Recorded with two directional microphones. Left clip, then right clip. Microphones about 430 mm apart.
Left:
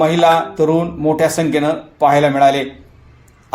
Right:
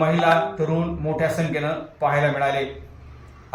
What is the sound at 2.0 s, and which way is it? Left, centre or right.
Speech, centre.